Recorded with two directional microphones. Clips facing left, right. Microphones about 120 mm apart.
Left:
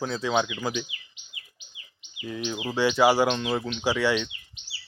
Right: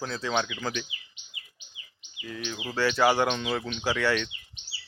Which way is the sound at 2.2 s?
20° left (ahead or behind).